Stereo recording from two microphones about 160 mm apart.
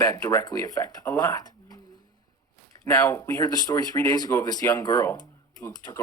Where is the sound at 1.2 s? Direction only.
25° left (ahead or behind).